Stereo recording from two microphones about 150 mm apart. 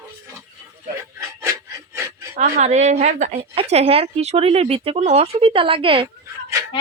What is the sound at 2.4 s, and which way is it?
A woman's voice, 50° right (ahead or behind).